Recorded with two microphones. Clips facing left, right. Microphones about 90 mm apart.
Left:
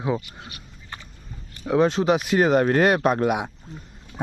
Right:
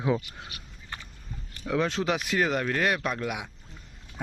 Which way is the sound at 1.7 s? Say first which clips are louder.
Left 7 dB; 25° left (ahead or behind).